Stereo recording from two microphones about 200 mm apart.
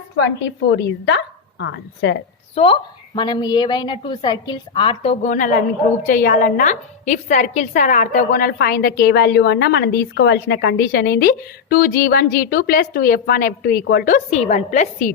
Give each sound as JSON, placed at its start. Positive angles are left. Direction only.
{"t": 0.7, "sound": "a woman's voice", "side_deg": 60}
{"t": 2.6, "sound": "a woman's voice", "side_deg": 25}